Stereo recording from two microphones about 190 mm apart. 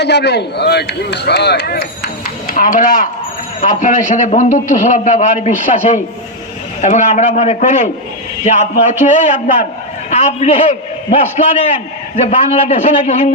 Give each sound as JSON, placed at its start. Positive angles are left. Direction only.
{"t": 0.0, "sound": "speech", "side_deg": 60}
{"t": 2.5, "sound": "a man's voice", "side_deg": 45}